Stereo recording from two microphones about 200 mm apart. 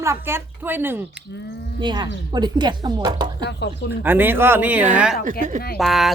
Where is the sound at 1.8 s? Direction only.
20° right (ahead or behind).